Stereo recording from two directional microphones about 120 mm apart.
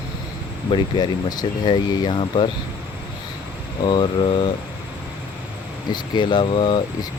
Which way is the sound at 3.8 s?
40° left (ahead or behind).